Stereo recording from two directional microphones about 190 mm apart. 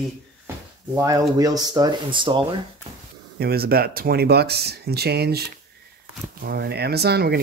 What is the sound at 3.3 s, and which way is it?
Speech, 55° right (ahead or behind).